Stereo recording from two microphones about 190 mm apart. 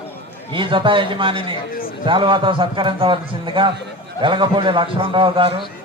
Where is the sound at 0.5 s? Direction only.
25° right (ahead or behind).